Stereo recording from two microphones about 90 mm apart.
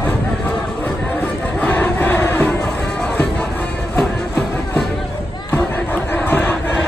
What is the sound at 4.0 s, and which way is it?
Music, 10° left (ahead or behind).